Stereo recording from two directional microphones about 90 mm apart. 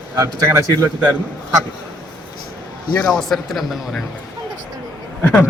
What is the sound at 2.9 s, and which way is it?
A man's voice, 10° left (ahead or behind).